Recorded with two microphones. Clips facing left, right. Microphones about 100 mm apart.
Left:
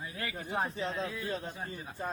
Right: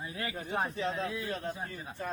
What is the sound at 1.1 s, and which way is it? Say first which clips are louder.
Speech: right 1 dB; 15° right (ahead or behind).